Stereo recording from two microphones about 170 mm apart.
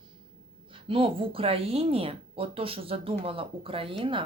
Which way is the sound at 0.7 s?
30° right (ahead or behind).